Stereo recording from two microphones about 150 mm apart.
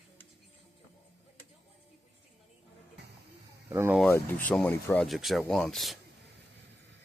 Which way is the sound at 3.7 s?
15° right (ahead or behind).